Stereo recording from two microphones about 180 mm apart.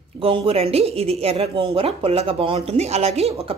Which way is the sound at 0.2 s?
30° right (ahead or behind).